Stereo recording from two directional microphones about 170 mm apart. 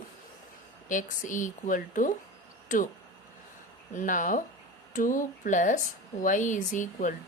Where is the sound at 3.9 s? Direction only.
50° left (ahead or behind).